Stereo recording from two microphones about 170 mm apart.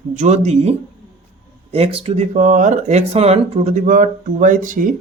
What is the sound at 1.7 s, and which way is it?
Speech, 35° right (ahead or behind).